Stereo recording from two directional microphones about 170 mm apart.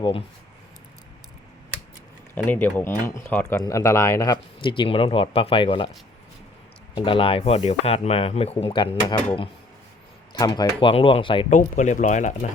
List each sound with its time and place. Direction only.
0.0 s speech: 35° left (ahead or behind)
2.3 s speech: 10° left (ahead or behind); by 5.9 s 30° left (ahead or behind)
6.9 s speech: 30° left (ahead or behind)
11.4 s speech: 45° left (ahead or behind)